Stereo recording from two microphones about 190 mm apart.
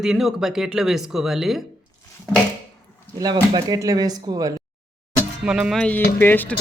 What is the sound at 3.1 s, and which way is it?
Speech, 20° right (ahead or behind).